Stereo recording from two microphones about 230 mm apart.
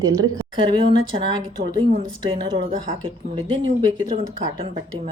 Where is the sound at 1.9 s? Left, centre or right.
Right.